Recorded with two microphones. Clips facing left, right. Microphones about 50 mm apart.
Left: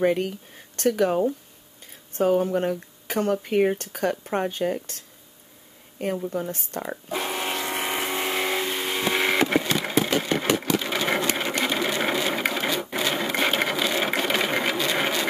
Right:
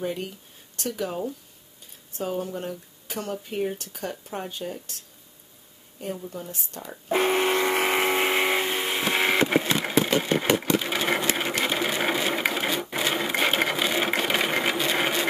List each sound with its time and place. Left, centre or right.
0.0 s speech: left
6.0 s speech: left
7.1 s a sound: right
7.9 s vehicle: right; by 9.7 s centre
9.8 s sewing machine: centre